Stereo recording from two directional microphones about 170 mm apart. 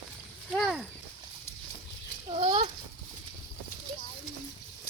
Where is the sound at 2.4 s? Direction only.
35° right (ahead or behind).